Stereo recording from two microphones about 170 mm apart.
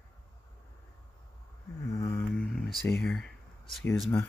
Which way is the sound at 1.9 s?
20° left (ahead or behind).